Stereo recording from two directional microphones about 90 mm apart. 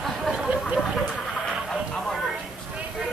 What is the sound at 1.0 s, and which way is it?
Chicken, 5° left (ahead or behind).